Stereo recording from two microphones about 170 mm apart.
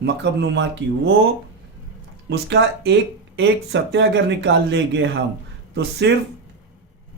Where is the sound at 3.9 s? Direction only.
90° right.